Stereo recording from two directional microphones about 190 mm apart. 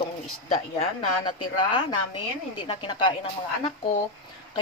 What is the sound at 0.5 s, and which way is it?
Speech, 40° left (ahead or behind).